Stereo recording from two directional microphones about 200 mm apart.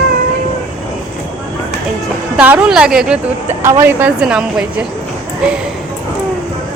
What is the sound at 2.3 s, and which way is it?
A woman's voice, 5° right (ahead or behind).